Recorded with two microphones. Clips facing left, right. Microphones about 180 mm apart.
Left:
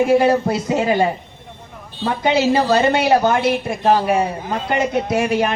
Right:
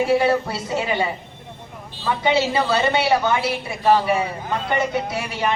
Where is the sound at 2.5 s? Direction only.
40° left (ahead or behind).